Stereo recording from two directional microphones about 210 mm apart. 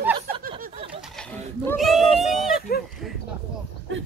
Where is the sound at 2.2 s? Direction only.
Centre (ahead or behind).